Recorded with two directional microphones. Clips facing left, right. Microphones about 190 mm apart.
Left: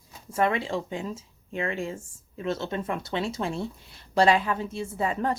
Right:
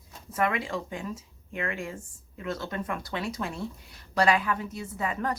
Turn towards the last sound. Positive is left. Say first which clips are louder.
# left 3 dB
turn(degrees=30)  # may be behind; listen again after turning